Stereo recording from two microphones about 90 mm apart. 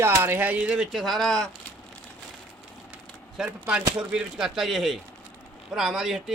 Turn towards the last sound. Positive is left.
turn(degrees=-5)  # may be behind; listen again after turning